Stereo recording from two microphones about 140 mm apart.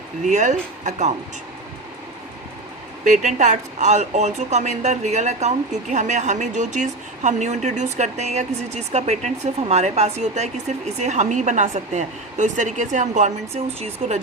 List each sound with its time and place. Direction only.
0.3 s speech: 60° right (ahead or behind)
3.0 s speech: 65° right (ahead or behind)